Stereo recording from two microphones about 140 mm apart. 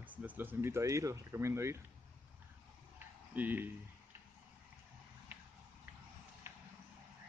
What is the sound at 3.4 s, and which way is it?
Speech, 15° right (ahead or behind).